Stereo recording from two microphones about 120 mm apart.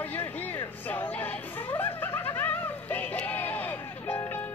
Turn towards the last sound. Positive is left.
turn(degrees=20)  # may be behind; listen again after turning